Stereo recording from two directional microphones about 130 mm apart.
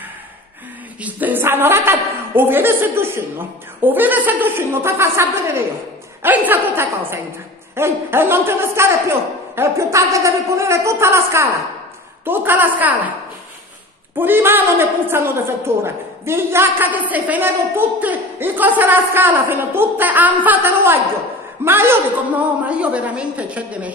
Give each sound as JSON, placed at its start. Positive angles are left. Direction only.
{"t": 1.0, "sound": "a woman's voice", "side_deg": -15}
{"t": 14.1, "sound": "a woman's voice", "side_deg": -15}